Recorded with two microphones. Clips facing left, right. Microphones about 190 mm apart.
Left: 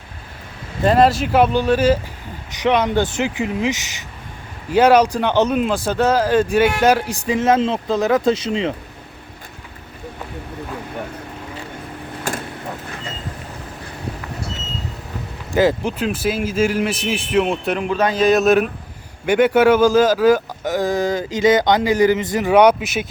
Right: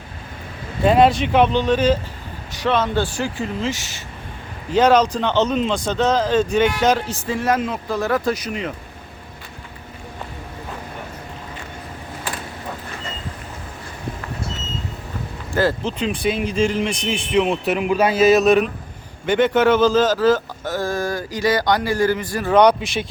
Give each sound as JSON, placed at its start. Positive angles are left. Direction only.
{"t": 0.9, "sound": "a man's voice", "side_deg": 0}
{"t": 15.5, "sound": "a man's voice", "side_deg": 15}